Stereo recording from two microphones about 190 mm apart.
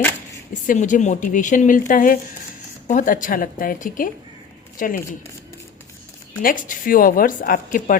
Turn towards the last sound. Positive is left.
turn(degrees=45)  # may be behind; listen again after turning